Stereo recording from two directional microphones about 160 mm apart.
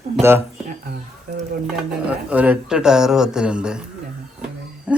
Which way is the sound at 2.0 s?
10° right (ahead or behind).